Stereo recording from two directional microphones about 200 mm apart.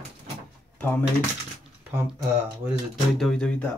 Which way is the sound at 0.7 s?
10° left (ahead or behind).